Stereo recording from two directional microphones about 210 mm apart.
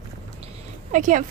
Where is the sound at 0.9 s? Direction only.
40° right (ahead or behind).